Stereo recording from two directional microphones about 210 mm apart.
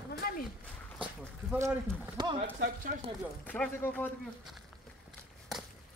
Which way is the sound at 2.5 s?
40° right (ahead or behind).